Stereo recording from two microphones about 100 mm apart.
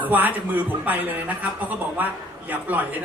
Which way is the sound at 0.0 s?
20° right (ahead or behind).